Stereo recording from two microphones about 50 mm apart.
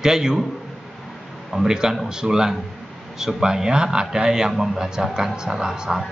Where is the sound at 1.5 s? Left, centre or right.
Centre.